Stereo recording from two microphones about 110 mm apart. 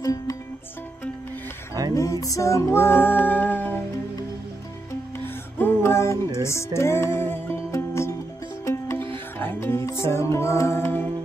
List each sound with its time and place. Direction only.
0.0 s music: 35° left (ahead or behind)
2.0 s music: 30° left (ahead or behind)
5.2 s music: 20° left (ahead or behind)